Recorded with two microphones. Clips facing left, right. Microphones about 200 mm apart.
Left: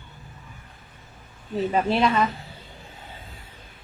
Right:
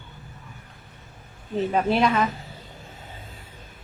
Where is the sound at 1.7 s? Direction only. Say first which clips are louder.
Even; centre (ahead or behind).